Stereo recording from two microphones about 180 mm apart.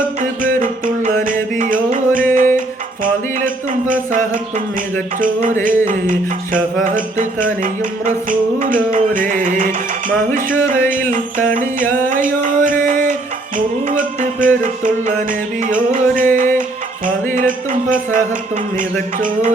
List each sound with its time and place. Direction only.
0.2 s music: 50° right (ahead or behind)
3.0 s a sound: 50° right (ahead or behind)
5.8 s music: 50° right (ahead or behind)
11.1 s music: 50° right (ahead or behind)
17.3 s speech: 45° right (ahead or behind)
18.8 s music: 50° right (ahead or behind)